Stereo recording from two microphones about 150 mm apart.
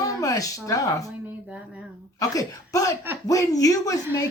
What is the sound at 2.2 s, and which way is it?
Speech, 20° left (ahead or behind).